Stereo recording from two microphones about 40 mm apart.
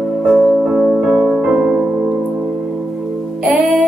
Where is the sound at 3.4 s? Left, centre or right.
Right.